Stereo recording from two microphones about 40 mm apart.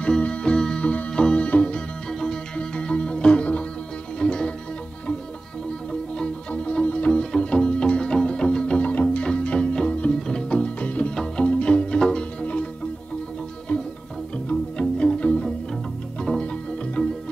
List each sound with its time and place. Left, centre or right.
0.2 s music: left
2.0 s music: centre
2.5 s music: left
5.9 s music: left
7.1 s music: centre
11.8 s music: centre
13.7 s music: left